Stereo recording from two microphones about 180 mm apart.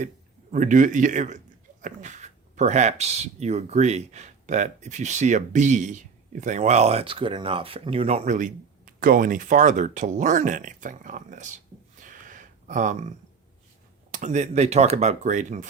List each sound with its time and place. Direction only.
0.5 s speech: 45° right (ahead or behind)